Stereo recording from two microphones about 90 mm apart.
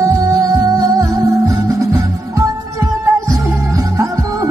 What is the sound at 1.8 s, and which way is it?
Music, 40° right (ahead or behind).